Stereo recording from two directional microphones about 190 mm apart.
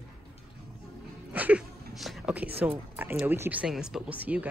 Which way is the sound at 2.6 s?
10° right (ahead or behind).